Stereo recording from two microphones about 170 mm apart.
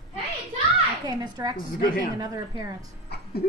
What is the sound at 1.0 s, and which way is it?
A woman's voice, 25° right (ahead or behind).